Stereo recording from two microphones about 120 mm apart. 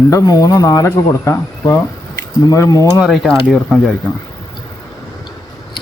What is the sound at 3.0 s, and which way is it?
Speech, centre (ahead or behind).